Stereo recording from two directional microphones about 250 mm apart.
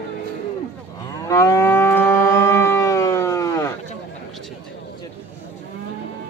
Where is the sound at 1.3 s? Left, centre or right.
Centre.